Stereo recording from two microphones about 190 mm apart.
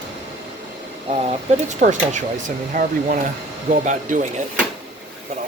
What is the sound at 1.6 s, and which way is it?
Speech, 40° right (ahead or behind).